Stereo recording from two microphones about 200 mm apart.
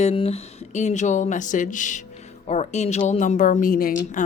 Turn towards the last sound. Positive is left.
turn(degrees=45)  # may be behind; listen again after turning